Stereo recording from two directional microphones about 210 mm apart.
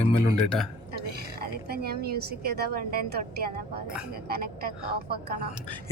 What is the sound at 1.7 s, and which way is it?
A woman's voice, 45° right (ahead or behind).